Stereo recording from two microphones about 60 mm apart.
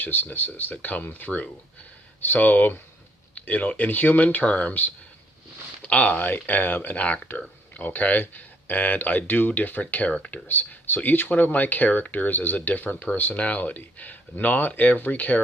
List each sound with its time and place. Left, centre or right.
0.0 s speech: left
10.1 s speech: centre
10.5 s speech: left